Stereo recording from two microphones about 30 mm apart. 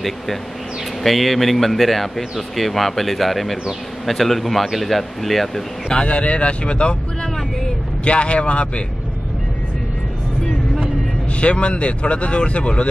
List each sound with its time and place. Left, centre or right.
1.0 s speech: centre
6.0 s speech: left
8.0 s speech: left
11.3 s speech: left